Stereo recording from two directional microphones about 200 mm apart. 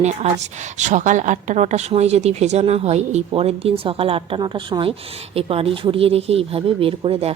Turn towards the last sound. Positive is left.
turn(degrees=-30)  # may be behind; listen again after turning